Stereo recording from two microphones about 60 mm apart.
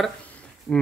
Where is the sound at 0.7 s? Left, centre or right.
Centre.